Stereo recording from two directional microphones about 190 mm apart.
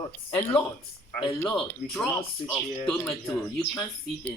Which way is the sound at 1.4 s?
10° left (ahead or behind).